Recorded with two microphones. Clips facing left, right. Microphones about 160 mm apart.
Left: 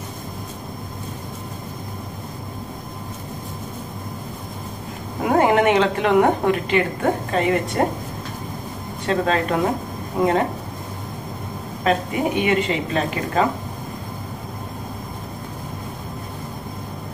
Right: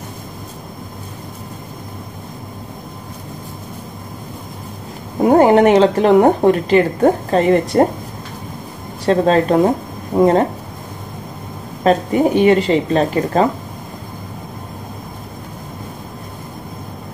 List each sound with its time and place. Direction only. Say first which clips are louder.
5.2 s a woman's voice: right 7 dB; 35° right (ahead or behind)
9.0 s a woman's voice: right 7 dB; 35° right (ahead or behind)
11.8 s a woman's voice: right 7 dB; 35° right (ahead or behind)